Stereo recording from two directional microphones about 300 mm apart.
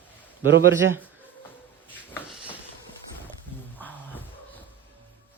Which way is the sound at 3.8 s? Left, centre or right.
Centre.